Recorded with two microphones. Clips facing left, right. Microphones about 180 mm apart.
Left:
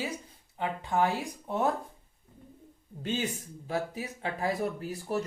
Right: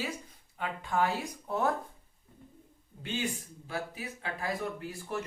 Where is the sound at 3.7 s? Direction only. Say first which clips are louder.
Left 5 dB; 40° left (ahead or behind).